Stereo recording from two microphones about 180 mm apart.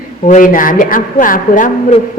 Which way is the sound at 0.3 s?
45° left (ahead or behind).